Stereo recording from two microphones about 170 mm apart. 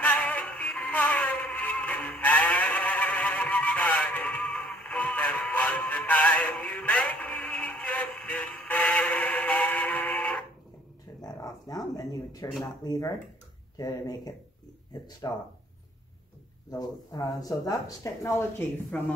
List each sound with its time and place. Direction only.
0.0 s synthetic singing: 5° left (ahead or behind)
11.1 s a sound: 20° left (ahead or behind)
12.8 s speech: 20° left (ahead or behind)
16.7 s speech: 25° left (ahead or behind)
18.9 s speech: 5° left (ahead or behind)